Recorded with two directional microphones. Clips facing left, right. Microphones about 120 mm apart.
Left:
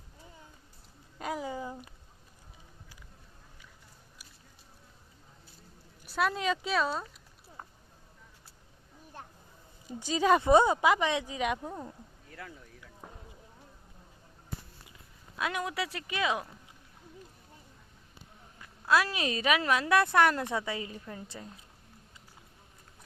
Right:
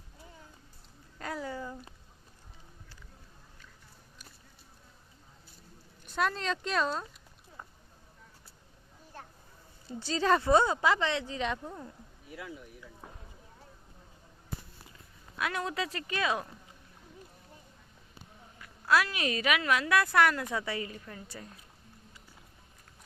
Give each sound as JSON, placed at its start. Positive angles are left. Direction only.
{"t": 1.2, "sound": "a sound", "side_deg": 15}
{"t": 6.1, "sound": "speech", "side_deg": 5}
{"t": 9.8, "sound": "speech", "side_deg": 15}
{"t": 15.4, "sound": "speech", "side_deg": 20}
{"t": 15.6, "sound": "speech", "side_deg": 10}
{"t": 18.6, "sound": "a sound", "side_deg": 25}
{"t": 19.0, "sound": "a woman's voice", "side_deg": 25}